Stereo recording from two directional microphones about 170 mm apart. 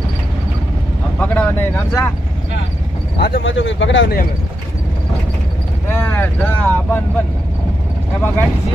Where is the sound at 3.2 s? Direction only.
70° left (ahead or behind); by 4.2 s 90° left.